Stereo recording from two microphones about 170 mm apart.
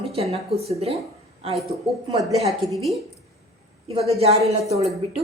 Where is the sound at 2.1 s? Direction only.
20° right (ahead or behind).